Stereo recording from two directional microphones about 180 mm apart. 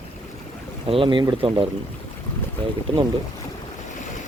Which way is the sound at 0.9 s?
30° right (ahead or behind).